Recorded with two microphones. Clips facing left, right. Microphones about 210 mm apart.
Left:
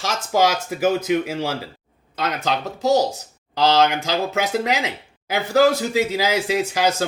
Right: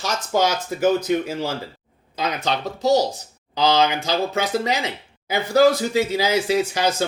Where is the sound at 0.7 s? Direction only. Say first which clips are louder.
Even; 10° left (ahead or behind).